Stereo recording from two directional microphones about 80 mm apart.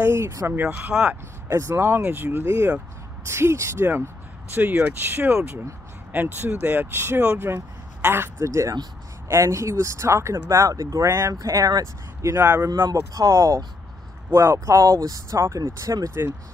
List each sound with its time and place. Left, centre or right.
0.0 s speech: right
0.5 s speech: right
1.5 s speech: right
2.4 s speech: right
16.1 s speech: right